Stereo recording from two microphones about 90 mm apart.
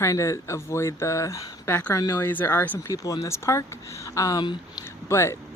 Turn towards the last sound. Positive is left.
turn(degrees=30)  # may be behind; listen again after turning